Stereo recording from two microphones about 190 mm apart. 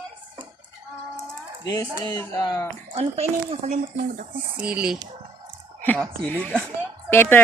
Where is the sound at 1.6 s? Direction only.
20° left (ahead or behind).